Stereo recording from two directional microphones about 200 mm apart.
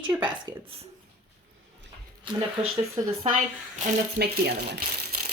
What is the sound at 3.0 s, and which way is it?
Speech, 15° right (ahead or behind).